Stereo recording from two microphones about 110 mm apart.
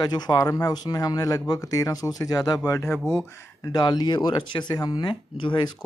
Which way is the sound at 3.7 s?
40° left (ahead or behind).